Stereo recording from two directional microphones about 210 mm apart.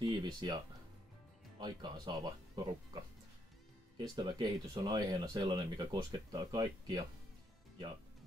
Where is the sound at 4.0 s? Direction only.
20° right (ahead or behind).